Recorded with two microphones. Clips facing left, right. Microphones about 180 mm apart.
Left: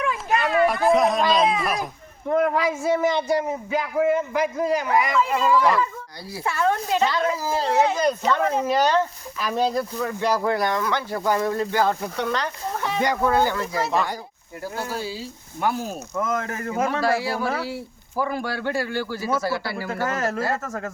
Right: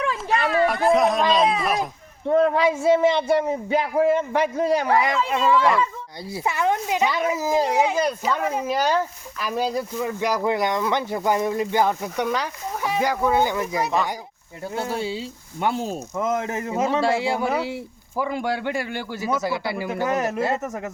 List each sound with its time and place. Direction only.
0.3 s a sound: 35° right (ahead or behind)
0.7 s speech: centre (ahead or behind)
2.3 s a man's voice: 25° right (ahead or behind)